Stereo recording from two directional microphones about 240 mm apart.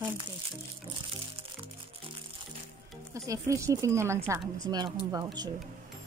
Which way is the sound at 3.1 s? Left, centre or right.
Centre.